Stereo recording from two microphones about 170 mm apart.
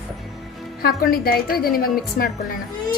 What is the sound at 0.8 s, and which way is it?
A woman's voice, 60° left (ahead or behind).